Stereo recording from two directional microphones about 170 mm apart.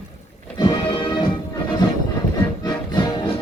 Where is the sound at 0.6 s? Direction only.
25° left (ahead or behind).